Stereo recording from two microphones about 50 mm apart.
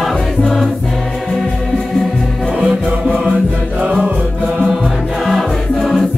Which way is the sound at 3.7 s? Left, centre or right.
Right.